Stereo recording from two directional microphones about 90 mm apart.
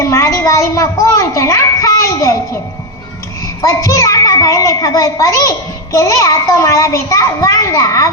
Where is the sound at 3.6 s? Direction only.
40° left (ahead or behind).